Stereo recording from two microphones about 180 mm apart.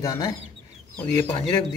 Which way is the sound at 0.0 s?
20° left (ahead or behind).